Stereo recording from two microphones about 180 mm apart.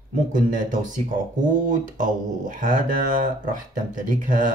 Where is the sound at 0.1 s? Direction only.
45° right (ahead or behind).